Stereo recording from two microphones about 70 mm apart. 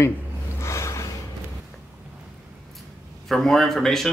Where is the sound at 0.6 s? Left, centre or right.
Left.